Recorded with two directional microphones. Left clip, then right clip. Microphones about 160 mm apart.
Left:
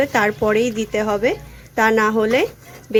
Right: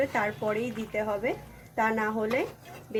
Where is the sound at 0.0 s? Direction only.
55° left (ahead or behind).